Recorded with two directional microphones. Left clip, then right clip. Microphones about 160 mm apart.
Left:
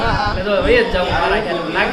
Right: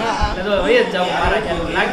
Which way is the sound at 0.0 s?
Centre (ahead or behind).